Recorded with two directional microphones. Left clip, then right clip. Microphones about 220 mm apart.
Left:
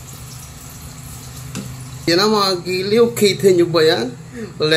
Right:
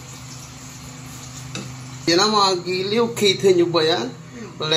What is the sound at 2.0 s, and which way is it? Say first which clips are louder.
A man's voice: left 2 dB; 20° left (ahead or behind).